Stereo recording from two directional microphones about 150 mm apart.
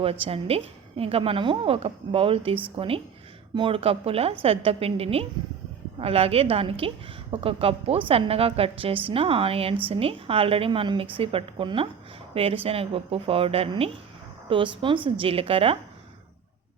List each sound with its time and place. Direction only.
0.0 s a woman's voice: 40° right (ahead or behind)